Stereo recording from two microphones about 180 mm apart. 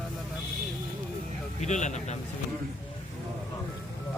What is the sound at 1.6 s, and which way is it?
Speech, 40° left (ahead or behind).